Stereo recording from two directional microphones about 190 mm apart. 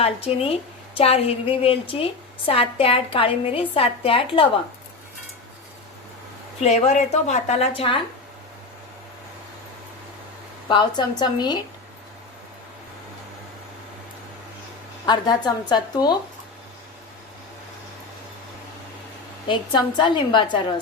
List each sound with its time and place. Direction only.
0.0 s a woman's voice: 30° left (ahead or behind)
6.6 s a woman's voice: 35° left (ahead or behind)
10.7 s a woman's voice: 20° left (ahead or behind)
15.0 s a woman's voice: 20° left (ahead or behind)
19.5 s a woman's voice: 25° left (ahead or behind)